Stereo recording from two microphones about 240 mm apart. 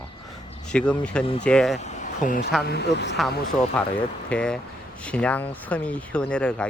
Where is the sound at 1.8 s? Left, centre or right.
Left.